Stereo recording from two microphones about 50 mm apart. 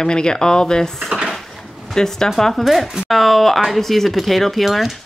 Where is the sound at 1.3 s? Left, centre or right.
Centre.